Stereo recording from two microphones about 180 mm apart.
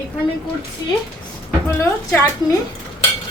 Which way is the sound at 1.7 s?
15° left (ahead or behind).